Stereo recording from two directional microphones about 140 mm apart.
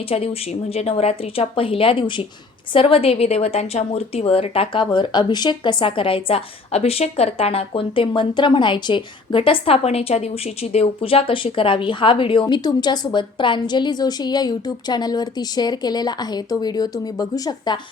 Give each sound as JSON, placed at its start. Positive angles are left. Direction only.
{"t": 0.0, "sound": "a woman's voice", "side_deg": 45}